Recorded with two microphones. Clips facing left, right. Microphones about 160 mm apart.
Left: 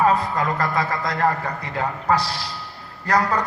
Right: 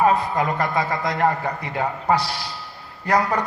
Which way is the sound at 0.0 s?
20° right (ahead or behind).